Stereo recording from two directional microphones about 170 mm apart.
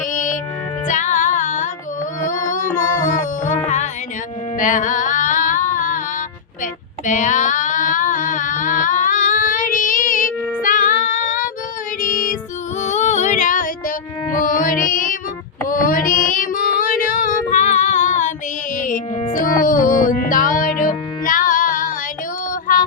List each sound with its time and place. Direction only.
0.1 s music: 50° left (ahead or behind)
7.0 s a sound: 45° left (ahead or behind)
12.8 s female singing: 45° left (ahead or behind)
14.3 s music: 55° left (ahead or behind)
15.6 s child singing: 55° left (ahead or behind)
19.3 s music: 55° left (ahead or behind)